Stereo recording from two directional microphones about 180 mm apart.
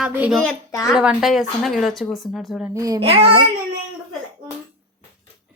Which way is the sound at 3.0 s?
30° right (ahead or behind).